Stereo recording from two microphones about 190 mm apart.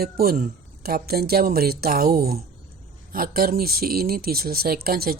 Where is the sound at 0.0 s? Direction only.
50° right (ahead or behind).